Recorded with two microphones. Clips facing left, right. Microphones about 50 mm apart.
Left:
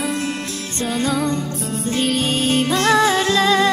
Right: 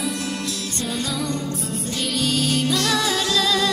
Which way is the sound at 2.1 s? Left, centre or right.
Left.